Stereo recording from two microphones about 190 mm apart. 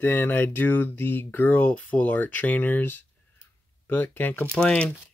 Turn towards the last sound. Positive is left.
turn(degrees=5)  # may be behind; listen again after turning